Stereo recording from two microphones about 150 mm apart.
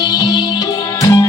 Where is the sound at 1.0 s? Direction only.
20° left (ahead or behind).